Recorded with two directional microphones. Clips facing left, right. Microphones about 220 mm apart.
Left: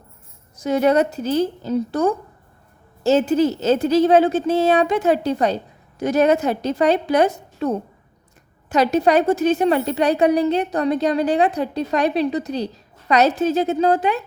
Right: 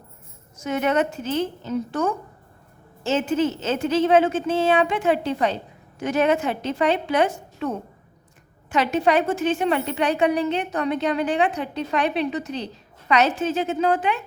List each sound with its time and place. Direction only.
0.5 s a woman's voice: 35° left (ahead or behind)